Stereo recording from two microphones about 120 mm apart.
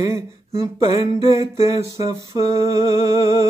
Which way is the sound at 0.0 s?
25° right (ahead or behind).